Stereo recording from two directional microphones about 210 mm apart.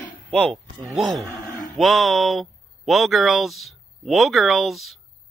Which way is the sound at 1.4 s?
35° left (ahead or behind).